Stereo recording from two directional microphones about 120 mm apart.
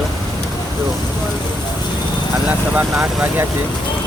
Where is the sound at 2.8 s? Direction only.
15° right (ahead or behind).